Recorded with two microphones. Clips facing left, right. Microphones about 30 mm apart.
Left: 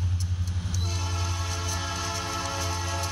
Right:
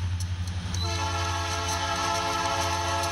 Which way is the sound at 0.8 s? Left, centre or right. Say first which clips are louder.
Right 6 dB; right.